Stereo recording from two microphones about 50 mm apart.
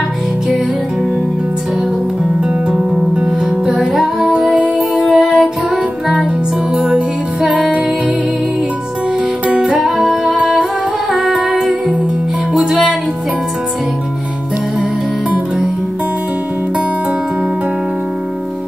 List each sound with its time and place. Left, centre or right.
3.2 s music: centre
6.7 s music: centre
9.5 s music: centre
9.8 s music: centre
10.3 s music: centre